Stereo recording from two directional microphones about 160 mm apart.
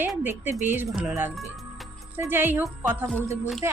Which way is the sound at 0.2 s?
15° right (ahead or behind).